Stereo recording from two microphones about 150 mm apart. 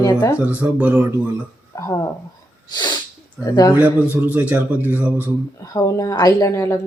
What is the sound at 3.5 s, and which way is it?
Speech, 25° left (ahead or behind).